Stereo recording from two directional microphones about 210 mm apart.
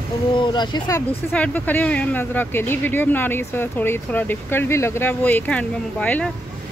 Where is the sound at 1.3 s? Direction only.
5° left (ahead or behind).